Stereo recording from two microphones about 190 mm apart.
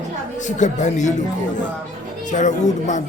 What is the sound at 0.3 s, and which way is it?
Speech, 40° left (ahead or behind).